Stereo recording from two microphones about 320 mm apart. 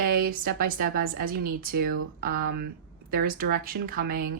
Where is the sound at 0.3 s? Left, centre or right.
Right.